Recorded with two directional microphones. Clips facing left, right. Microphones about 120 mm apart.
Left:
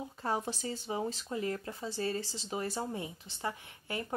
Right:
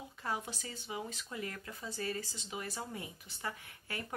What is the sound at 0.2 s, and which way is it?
Speech, 35° left (ahead or behind).